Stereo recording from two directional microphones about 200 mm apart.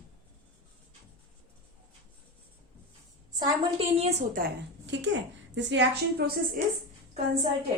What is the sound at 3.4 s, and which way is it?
Speech, 25° right (ahead or behind).